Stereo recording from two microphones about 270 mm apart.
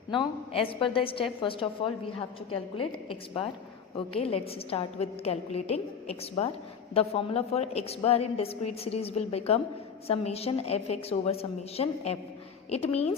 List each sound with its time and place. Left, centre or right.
0.1 s a woman's voice: centre